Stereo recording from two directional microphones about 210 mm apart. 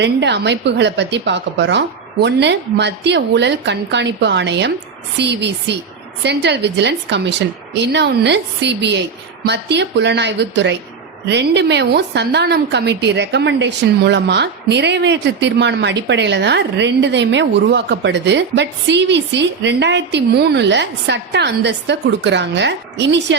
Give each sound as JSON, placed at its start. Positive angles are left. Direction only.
{"t": 0.0, "sound": "a woman's voice", "side_deg": -55}